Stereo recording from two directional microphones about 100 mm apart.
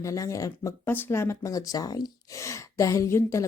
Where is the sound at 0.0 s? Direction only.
30° left (ahead or behind).